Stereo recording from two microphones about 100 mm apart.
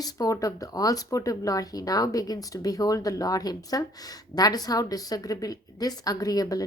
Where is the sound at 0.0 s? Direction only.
35° left (ahead or behind).